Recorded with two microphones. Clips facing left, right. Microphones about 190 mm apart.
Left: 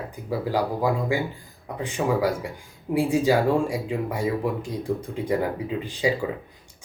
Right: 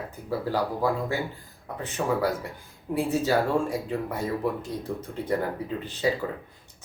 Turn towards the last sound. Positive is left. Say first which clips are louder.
# left 3 dB
turn(degrees=10)  # may be behind; listen again after turning